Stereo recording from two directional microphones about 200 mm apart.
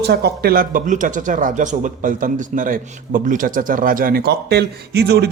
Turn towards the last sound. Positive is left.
turn(degrees=-55)  # may be behind; listen again after turning